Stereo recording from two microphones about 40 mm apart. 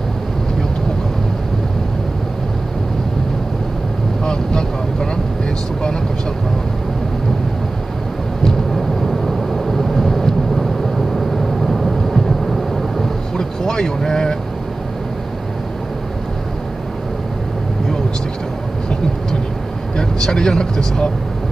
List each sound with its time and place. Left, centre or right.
4.2 s vehicle: centre
8.5 s vehicle: centre
13.4 s vehicle: centre
20.0 s vehicle: centre